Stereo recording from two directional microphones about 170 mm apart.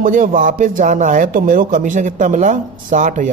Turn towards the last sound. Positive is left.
turn(degrees=-50)  # may be behind; listen again after turning